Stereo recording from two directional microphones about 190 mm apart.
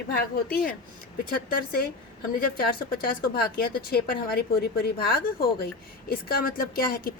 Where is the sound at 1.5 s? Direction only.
50° left (ahead or behind).